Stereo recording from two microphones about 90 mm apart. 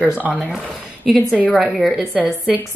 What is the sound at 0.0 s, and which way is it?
A woman's voice, 15° right (ahead or behind).